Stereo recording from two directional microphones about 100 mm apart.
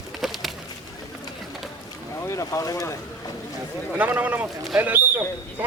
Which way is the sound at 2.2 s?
30° left (ahead or behind).